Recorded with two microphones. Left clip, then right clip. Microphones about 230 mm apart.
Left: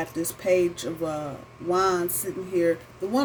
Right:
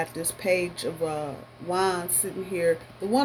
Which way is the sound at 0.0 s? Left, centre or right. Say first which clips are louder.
Left 1 dB; right.